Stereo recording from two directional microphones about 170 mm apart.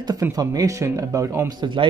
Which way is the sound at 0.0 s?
20° right (ahead or behind).